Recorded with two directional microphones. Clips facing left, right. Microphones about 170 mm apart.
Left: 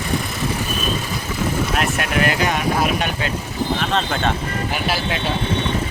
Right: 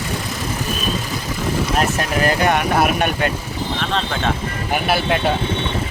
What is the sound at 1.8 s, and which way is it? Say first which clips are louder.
Vehicle: right 2 dB; 35° right (ahead or behind).